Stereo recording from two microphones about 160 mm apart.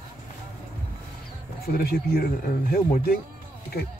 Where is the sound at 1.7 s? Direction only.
65° left (ahead or behind).